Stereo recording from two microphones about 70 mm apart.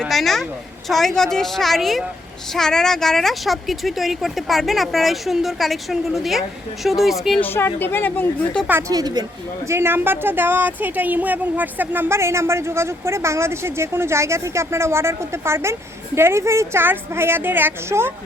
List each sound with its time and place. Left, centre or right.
0.1 s a woman's voice: centre
7.4 s a woman's voice: left
8.9 s a woman's voice: right
9.6 s speech: right